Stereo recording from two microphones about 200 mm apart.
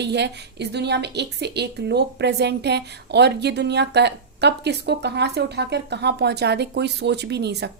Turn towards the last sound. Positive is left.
turn(degrees=-55)  # may be behind; listen again after turning